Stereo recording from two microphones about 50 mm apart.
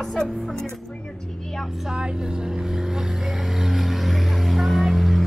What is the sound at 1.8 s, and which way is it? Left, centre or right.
Vehicle, centre.